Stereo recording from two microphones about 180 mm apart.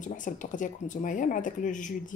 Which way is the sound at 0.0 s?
45° left (ahead or behind).